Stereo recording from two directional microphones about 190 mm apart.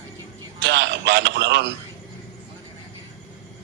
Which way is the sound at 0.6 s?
70° right (ahead or behind).